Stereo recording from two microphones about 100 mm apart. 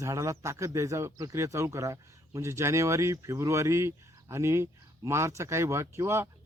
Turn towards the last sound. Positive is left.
turn(degrees=-30)  # may be behind; listen again after turning